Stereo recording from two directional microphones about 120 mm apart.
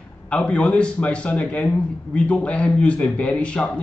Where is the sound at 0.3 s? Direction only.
10° left (ahead or behind).